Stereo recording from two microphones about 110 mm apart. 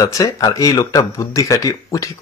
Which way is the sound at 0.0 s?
30° left (ahead or behind).